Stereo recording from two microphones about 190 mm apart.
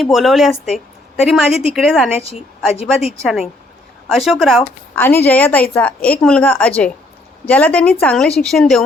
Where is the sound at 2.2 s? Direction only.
30° left (ahead or behind).